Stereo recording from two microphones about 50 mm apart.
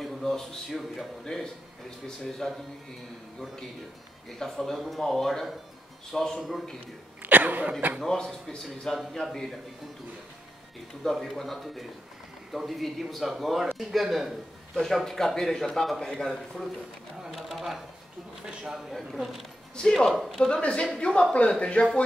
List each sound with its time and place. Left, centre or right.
0.0 s a man's voice: centre
4.4 s a man's voice: centre
7.2 s a sound: right
8.0 s a man's voice: centre
11.1 s speech: centre
14.8 s a man's voice: centre
17.4 s speech: centre
18.4 s a man's voice: centre
18.9 s speech: centre
19.7 s a man's voice: centre